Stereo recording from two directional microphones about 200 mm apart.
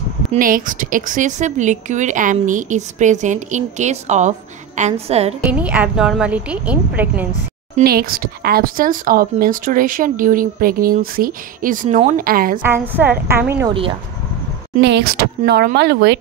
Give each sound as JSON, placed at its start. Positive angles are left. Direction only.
{"t": 0.3, "sound": "a woman's voice", "side_deg": -45}
{"t": 5.4, "sound": "a woman's voice", "side_deg": -5}
{"t": 7.8, "sound": "a woman's voice", "side_deg": -50}
{"t": 12.6, "sound": "a woman's voice", "side_deg": -10}
{"t": 14.8, "sound": "speech", "side_deg": -60}